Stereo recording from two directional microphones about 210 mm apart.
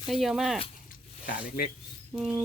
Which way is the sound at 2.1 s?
5° right (ahead or behind).